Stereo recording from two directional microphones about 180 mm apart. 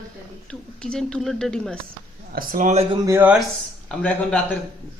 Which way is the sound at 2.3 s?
55° right (ahead or behind).